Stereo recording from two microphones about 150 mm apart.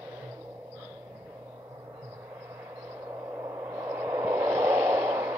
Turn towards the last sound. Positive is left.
turn(degrees=-15)  # may be behind; listen again after turning